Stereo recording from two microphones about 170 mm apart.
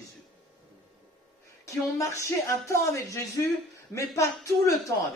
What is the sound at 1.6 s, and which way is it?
A woman's voice, 20° left (ahead or behind).